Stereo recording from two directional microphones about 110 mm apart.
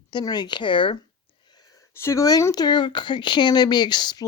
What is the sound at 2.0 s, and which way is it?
Speech, 30° left (ahead or behind).